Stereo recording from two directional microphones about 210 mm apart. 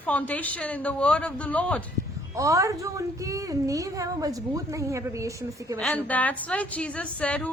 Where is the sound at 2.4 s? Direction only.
15° right (ahead or behind).